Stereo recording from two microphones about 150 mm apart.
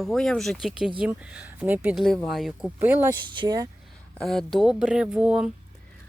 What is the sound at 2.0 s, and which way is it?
Speech, 5° left (ahead or behind).